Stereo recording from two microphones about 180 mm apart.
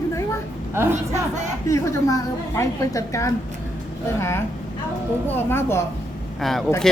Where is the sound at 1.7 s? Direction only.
15° left (ahead or behind).